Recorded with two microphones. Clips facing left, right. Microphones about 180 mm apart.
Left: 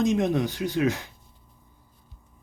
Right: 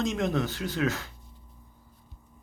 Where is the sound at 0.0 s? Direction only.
20° left (ahead or behind).